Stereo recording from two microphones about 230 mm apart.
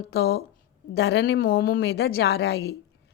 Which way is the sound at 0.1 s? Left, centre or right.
Left.